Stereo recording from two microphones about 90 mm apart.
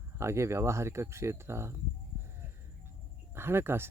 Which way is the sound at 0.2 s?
30° right (ahead or behind).